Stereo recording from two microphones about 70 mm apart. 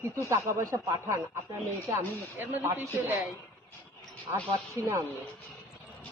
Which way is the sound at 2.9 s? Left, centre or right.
Right.